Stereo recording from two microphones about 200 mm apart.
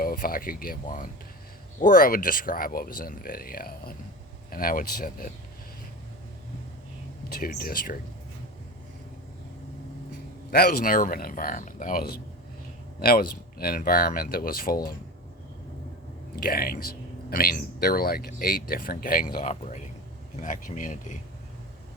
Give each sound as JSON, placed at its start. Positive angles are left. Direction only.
{"t": 0.0, "sound": "speech", "side_deg": 45}
{"t": 7.3, "sound": "speech", "side_deg": 45}
{"t": 10.5, "sound": "speech", "side_deg": 50}
{"t": 16.3, "sound": "speech", "side_deg": 45}
{"t": 20.4, "sound": "speech", "side_deg": 40}